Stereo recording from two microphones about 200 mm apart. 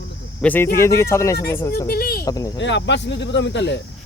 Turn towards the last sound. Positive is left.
turn(degrees=60)  # may be behind; listen again after turning